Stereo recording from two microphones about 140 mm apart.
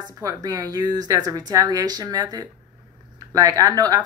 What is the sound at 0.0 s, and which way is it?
Speech, 25° right (ahead or behind).